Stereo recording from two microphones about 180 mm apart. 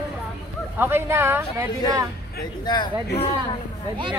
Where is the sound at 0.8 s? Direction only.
15° right (ahead or behind).